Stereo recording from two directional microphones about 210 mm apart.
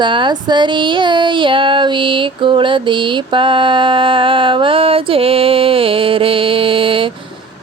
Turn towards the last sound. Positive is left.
turn(degrees=-25)  # may be behind; listen again after turning